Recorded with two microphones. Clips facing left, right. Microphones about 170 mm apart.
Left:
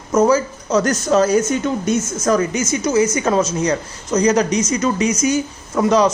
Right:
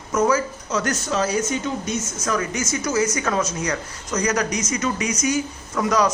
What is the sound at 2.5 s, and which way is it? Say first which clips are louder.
A man's voice: left 6 dB; 20° left (ahead or behind).